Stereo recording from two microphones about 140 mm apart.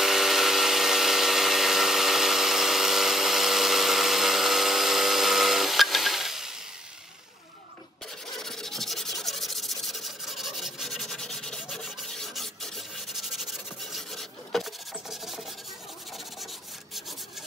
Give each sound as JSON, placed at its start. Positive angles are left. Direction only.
{"t": 0.0, "sound": "power tool", "side_deg": 0}
{"t": 8.4, "sound": "rub", "side_deg": 5}